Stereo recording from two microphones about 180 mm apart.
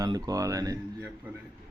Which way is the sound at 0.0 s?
20° right (ahead or behind).